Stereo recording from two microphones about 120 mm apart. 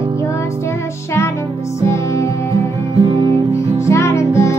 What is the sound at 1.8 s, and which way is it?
Music, 25° left (ahead or behind).